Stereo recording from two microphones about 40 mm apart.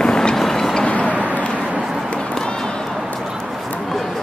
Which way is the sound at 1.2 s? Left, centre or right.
Right.